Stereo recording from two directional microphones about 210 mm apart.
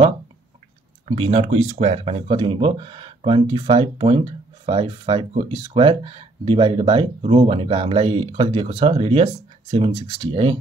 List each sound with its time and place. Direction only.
1.0 s speech: 30° right (ahead or behind)